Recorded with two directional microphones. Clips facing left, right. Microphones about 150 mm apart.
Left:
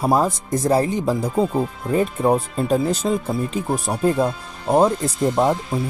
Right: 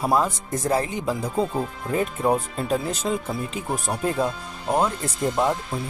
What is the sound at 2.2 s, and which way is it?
Speech, 35° left (ahead or behind).